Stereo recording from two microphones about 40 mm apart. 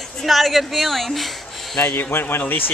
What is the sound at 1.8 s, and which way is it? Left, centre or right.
Speech, left.